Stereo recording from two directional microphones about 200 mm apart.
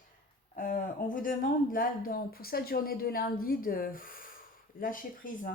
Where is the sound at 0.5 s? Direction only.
40° left (ahead or behind).